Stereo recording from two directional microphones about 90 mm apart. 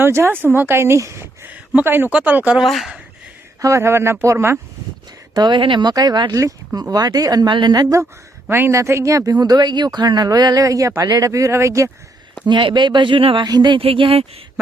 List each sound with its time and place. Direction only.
0.0 s speech: 25° right (ahead or behind)
2.6 s speech: centre (ahead or behind)
3.6 s speech: 30° right (ahead or behind)
5.3 s speech: 55° right (ahead or behind)
5.9 s speech: 45° right (ahead or behind)
8.4 s speech: 25° right (ahead or behind)
12.5 s speech: 60° right (ahead or behind)
13.4 s speech: 50° right (ahead or behind)
13.7 s speech: 80° right